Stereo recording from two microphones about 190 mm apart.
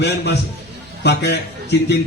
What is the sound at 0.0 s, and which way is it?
Music, 60° left (ahead or behind).